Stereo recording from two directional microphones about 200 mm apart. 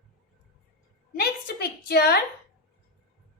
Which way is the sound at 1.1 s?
55° left (ahead or behind).